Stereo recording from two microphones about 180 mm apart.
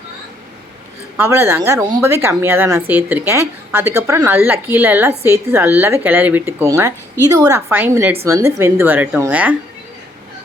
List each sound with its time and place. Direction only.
1.1 s speech: 15° right (ahead or behind)